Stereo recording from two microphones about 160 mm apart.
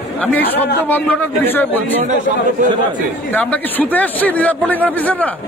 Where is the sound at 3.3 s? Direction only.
10° left (ahead or behind).